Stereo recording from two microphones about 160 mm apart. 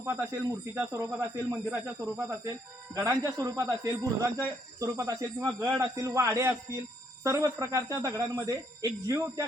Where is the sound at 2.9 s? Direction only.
20° right (ahead or behind).